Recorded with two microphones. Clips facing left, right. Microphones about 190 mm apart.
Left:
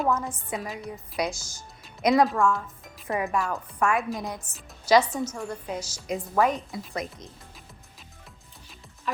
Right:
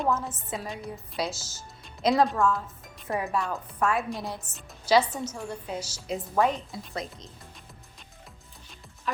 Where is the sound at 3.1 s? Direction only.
90° left.